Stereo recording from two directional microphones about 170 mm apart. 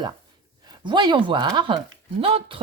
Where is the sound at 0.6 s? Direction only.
25° right (ahead or behind).